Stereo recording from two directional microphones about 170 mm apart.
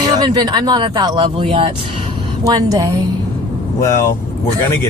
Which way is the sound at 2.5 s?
20° right (ahead or behind).